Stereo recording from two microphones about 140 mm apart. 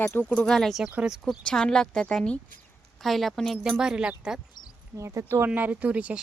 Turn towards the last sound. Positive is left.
turn(degrees=-10)  # may be behind; listen again after turning